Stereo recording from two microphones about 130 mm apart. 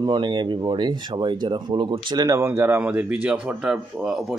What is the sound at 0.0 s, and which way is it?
Speech, 35° right (ahead or behind).